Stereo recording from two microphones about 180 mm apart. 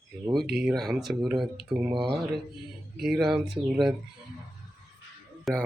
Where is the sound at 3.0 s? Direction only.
Centre (ahead or behind).